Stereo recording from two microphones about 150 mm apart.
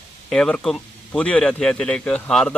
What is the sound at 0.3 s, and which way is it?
Speech, 5° left (ahead or behind).